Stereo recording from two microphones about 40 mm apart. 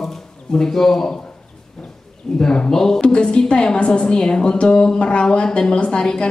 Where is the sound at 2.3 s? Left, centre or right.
Centre.